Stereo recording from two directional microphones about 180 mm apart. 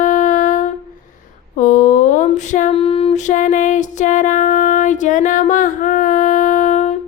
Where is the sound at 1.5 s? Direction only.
45° left (ahead or behind).